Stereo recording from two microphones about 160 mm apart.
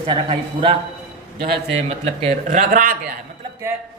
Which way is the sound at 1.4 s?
80° right.